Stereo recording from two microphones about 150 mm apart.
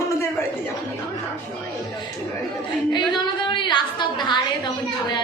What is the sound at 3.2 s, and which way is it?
A woman's voice, 30° left (ahead or behind).